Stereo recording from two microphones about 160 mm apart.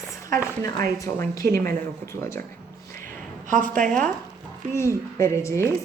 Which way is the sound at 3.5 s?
55° right (ahead or behind).